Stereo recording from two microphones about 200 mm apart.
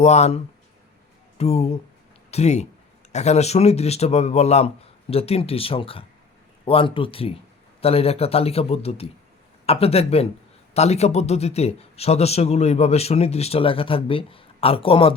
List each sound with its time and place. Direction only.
0.0 s speech: 35° left (ahead or behind)
1.4 s speech: 30° left (ahead or behind)